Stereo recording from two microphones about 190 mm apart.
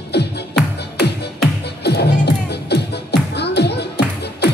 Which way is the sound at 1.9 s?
60° left (ahead or behind).